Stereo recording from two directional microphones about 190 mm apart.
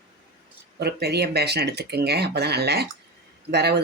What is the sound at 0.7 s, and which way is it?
Speech, 60° right (ahead or behind).